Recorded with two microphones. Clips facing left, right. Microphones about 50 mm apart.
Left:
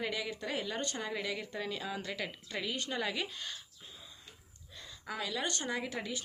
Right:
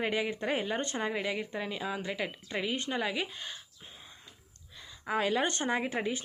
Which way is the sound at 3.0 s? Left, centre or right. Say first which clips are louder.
Right 3 dB; centre.